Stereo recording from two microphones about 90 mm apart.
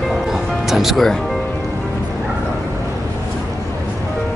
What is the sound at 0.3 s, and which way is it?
Music, 5° right (ahead or behind).